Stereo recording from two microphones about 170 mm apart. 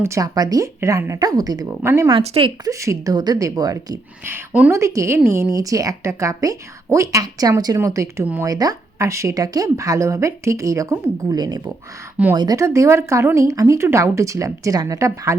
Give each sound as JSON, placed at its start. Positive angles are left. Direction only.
{"t": 0.0, "sound": "speech", "side_deg": -20}
{"t": 2.0, "sound": "speech", "side_deg": -30}
{"t": 2.6, "sound": "speech", "side_deg": -20}
{"t": 4.3, "sound": "speech", "side_deg": -10}